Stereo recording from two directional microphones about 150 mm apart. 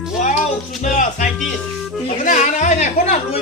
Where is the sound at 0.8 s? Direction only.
55° left (ahead or behind).